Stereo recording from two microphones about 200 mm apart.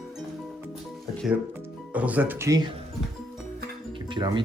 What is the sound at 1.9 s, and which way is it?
Speech, 5° right (ahead or behind).